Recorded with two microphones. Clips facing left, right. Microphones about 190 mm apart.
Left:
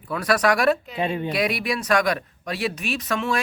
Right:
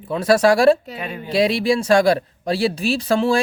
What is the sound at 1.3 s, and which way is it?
Speech, 25° right (ahead or behind).